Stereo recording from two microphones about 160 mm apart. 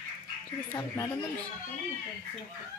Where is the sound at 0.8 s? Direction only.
15° left (ahead or behind).